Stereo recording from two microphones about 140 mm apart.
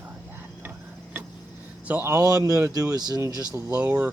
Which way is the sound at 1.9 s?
15° right (ahead or behind).